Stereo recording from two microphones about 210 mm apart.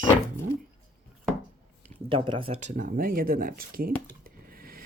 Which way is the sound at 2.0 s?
25° right (ahead or behind).